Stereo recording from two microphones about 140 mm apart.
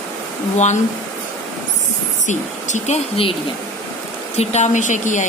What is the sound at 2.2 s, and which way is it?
A woman's voice, 60° left (ahead or behind).